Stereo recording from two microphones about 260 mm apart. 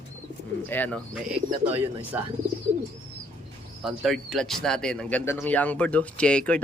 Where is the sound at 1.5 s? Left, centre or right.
Right.